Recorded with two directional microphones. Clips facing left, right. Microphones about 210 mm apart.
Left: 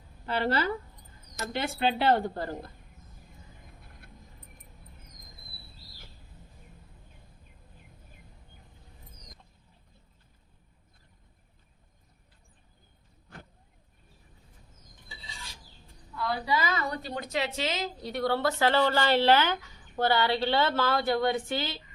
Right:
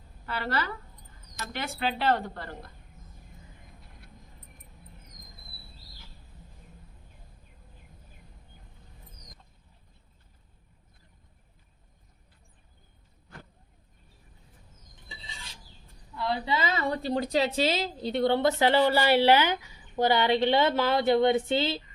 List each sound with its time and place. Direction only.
0.3 s speech: 25° left (ahead or behind)
16.1 s a woman's voice: 25° right (ahead or behind)